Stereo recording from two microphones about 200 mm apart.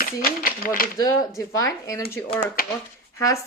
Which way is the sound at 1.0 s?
15° left (ahead or behind).